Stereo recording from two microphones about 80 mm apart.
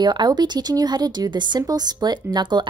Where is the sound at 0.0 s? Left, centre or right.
Right.